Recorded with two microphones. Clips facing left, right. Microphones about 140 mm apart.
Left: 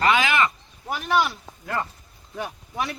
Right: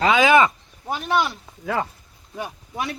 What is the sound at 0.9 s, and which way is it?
Speech, 20° right (ahead or behind).